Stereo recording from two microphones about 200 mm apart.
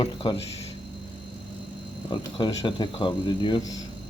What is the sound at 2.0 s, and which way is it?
Speech, 25° left (ahead or behind).